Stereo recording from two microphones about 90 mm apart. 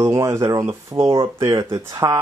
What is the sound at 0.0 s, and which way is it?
Speech, 35° right (ahead or behind).